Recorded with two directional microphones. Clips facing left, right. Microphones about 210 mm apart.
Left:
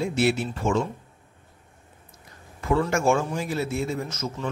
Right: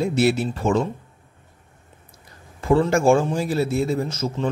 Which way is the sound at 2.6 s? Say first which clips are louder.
Right 5 dB; 30° right (ahead or behind).